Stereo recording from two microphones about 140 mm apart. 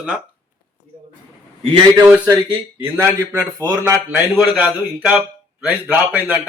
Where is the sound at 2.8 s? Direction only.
15° right (ahead or behind).